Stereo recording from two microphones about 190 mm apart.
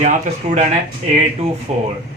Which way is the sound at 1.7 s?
35° right (ahead or behind).